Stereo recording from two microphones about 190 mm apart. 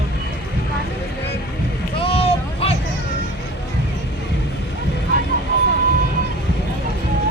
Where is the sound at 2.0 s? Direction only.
30° left (ahead or behind).